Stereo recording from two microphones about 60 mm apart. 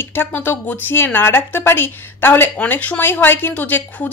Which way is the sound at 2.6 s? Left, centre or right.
Left.